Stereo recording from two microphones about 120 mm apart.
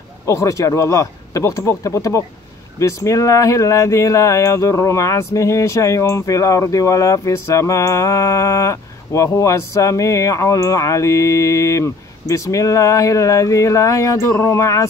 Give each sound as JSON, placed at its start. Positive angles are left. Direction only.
{"t": 0.3, "sound": "speech", "side_deg": 25}